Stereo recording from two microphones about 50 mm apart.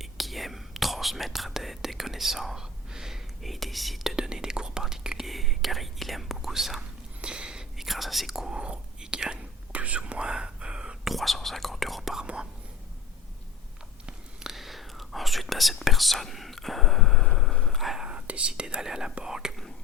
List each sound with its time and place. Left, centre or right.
0.0 s whispering: centre
3.4 s speech: centre
5.3 s speech: centre
7.2 s a sound: centre
7.8 s speech: centre
8.5 s speech: right
9.7 s whispering: right
10.0 s whispering: centre
11.0 s speech: centre
12.2 s speech: right
14.1 s whispering: centre
18.0 s speech: right